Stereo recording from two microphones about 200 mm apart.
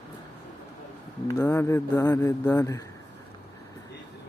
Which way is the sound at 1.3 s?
15° left (ahead or behind).